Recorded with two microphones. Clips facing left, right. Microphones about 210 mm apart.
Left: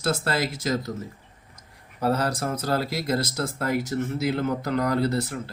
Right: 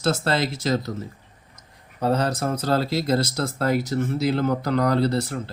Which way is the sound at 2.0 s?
20° right (ahead or behind).